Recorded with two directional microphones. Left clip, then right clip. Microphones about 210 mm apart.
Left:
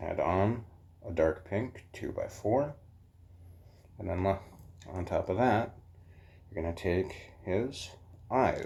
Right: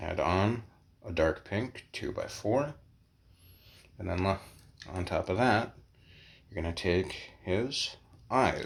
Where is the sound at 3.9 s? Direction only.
40° right (ahead or behind).